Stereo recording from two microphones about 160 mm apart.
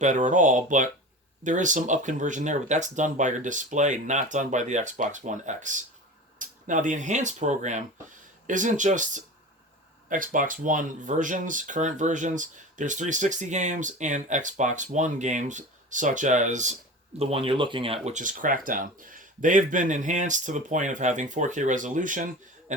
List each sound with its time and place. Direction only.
0.0 s speech: 50° right (ahead or behind)
17.2 s speech: 35° right (ahead or behind); by 22.3 s 55° right (ahead or behind)